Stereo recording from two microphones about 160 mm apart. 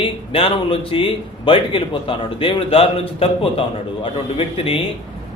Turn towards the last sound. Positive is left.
turn(degrees=35)  # may be behind; listen again after turning